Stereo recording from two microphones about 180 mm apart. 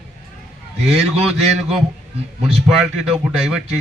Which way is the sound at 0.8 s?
35° right (ahead or behind).